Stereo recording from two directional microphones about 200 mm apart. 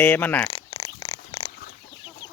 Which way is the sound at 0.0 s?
10° left (ahead or behind).